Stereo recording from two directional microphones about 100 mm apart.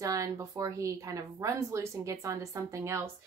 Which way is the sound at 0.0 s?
35° right (ahead or behind).